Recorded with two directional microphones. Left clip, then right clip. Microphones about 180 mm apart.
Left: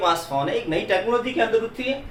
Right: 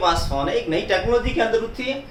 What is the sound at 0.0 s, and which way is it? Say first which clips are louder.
Speech: right 1 dB; 15° left (ahead or behind).